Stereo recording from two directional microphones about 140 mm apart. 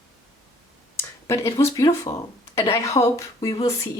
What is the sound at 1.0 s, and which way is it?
A woman's voice, 20° left (ahead or behind).